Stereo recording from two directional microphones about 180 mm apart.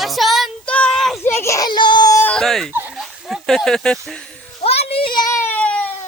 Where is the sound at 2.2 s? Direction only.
5° left (ahead or behind).